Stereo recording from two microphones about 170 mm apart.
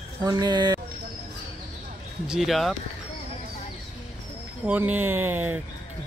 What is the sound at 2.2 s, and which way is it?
Speech, 5° right (ahead or behind).